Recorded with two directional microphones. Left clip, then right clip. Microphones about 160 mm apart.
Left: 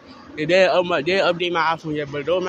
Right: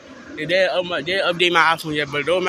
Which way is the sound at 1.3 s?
Centre (ahead or behind).